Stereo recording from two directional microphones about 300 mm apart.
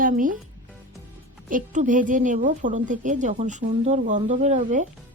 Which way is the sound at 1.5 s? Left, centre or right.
Right.